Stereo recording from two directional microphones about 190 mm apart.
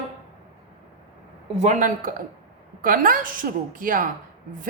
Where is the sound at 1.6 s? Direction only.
40° right (ahead or behind).